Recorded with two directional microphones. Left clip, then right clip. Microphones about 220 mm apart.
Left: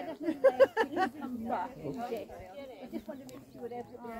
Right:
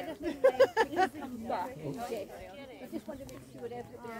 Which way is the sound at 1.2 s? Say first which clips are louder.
Even; 55° right (ahead or behind).